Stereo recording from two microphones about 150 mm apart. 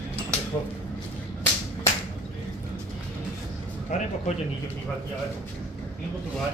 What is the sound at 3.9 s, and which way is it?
Speech, 50° left (ahead or behind).